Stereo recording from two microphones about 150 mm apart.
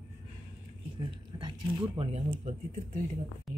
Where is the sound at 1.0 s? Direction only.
35° right (ahead or behind).